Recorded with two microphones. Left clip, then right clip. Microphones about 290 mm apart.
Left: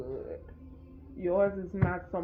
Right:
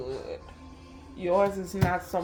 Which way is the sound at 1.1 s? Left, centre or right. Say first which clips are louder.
Right 3 dB; right.